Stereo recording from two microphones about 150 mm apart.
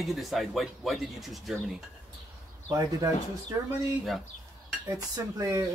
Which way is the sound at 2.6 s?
25° right (ahead or behind).